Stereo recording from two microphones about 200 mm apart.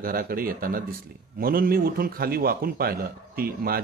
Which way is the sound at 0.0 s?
45° right (ahead or behind).